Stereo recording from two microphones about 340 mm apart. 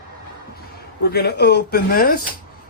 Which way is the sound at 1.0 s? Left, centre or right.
Left.